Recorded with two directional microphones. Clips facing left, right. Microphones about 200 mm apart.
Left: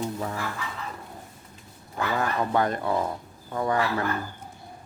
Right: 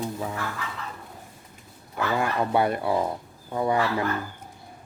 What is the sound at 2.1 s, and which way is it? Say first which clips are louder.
Speech: right 1 dB; 15° right (ahead or behind).